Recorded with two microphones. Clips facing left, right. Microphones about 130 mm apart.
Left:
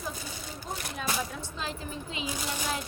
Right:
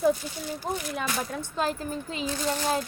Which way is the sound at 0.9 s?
50° right (ahead or behind).